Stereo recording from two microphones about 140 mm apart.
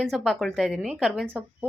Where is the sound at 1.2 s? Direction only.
15° right (ahead or behind).